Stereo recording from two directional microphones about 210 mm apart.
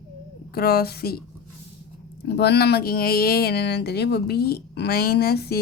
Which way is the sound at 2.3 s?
50° left (ahead or behind).